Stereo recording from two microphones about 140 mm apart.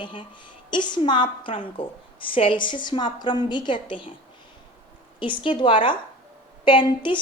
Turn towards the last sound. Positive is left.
turn(degrees=35)  # may be behind; listen again after turning